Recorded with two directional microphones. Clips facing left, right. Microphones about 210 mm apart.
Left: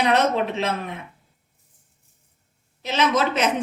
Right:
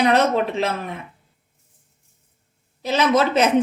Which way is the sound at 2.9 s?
30° right (ahead or behind).